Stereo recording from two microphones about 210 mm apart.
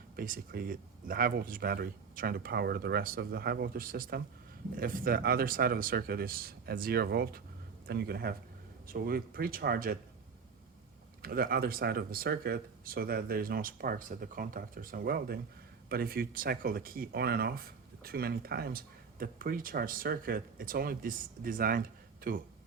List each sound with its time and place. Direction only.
0.2 s speech: 45° right (ahead or behind)
11.2 s speech: 45° right (ahead or behind)